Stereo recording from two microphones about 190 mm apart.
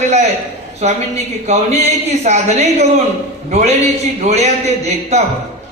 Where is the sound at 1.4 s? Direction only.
35° right (ahead or behind).